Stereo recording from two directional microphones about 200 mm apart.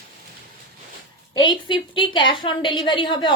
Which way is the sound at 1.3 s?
25° left (ahead or behind).